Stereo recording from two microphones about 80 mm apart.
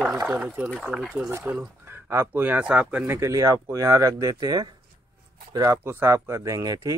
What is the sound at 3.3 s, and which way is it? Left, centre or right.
Speech, right.